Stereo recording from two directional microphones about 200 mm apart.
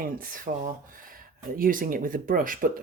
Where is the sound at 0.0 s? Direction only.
45° right (ahead or behind).